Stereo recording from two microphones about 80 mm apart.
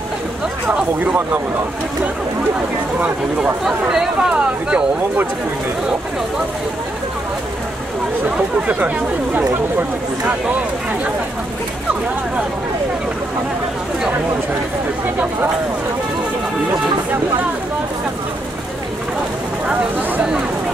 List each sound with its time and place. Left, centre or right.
0.7 s speech: centre
3.0 s speech: centre
3.9 s speech: centre
8.6 s speech: centre
19.7 s speech: centre